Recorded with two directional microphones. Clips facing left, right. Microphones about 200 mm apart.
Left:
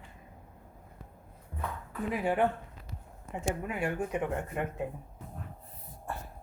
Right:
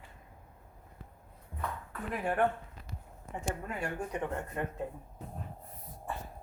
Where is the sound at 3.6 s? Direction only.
10° left (ahead or behind).